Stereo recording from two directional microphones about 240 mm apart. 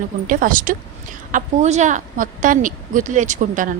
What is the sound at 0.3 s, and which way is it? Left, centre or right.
Speech, right.